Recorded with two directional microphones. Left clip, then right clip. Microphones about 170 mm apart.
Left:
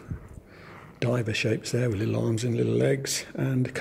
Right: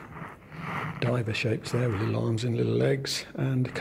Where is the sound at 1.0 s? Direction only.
60° left (ahead or behind).